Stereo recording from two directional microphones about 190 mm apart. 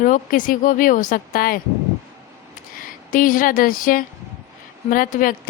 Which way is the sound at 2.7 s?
45° left (ahead or behind).